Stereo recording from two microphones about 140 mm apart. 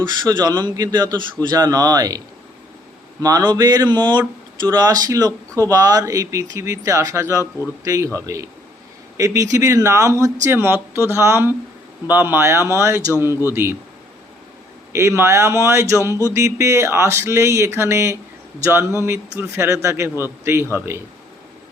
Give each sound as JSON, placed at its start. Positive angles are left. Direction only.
{"t": 0.0, "sound": "speech", "side_deg": -30}
{"t": 14.9, "sound": "speech", "side_deg": -20}